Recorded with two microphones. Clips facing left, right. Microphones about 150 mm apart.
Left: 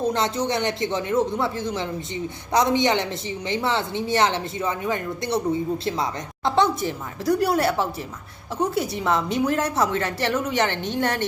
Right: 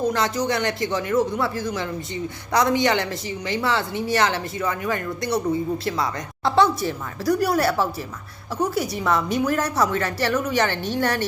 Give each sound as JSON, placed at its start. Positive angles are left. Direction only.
{"t": 0.0, "sound": "speech", "side_deg": 25}